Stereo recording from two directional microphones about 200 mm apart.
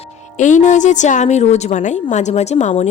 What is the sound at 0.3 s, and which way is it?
Speech, 40° left (ahead or behind).